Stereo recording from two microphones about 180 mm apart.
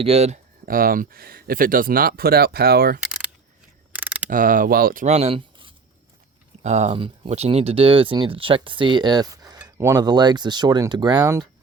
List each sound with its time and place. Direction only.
0.0 s speech: 35° right (ahead or behind)
0.6 s speech: 50° right (ahead or behind)
3.9 s mechanisms: 10° right (ahead or behind)
4.3 s speech: 50° right (ahead or behind)
5.0 s speech: 35° right (ahead or behind); by 11.4 s 20° right (ahead or behind)